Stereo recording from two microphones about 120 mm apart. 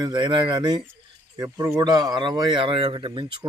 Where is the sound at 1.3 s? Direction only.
25° right (ahead or behind).